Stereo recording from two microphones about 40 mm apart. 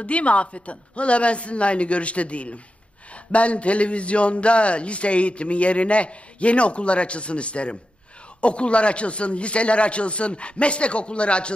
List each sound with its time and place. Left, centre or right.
0.0 s a man's voice: left